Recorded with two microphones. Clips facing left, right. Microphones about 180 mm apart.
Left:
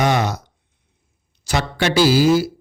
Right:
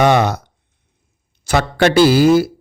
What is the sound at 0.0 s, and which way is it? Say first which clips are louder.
A man's voice: right 5 dB; 60° right (ahead or behind).